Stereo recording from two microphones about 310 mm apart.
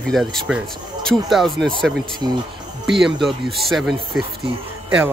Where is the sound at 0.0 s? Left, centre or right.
Centre.